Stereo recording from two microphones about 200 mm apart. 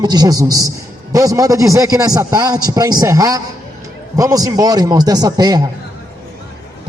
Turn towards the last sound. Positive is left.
turn(degrees=-20)  # may be behind; listen again after turning